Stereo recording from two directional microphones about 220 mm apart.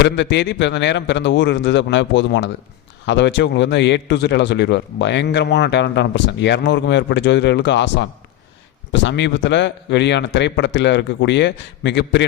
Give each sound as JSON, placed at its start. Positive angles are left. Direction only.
{"t": 0.0, "sound": "a man's voice", "side_deg": 50}